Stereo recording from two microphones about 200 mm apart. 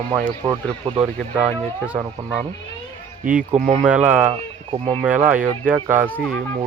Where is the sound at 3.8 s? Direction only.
5° right (ahead or behind).